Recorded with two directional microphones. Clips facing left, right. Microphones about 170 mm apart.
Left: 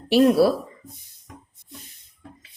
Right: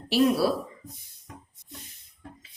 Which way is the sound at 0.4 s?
60° left (ahead or behind).